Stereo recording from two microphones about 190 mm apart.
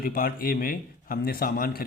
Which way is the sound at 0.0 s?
50° left (ahead or behind).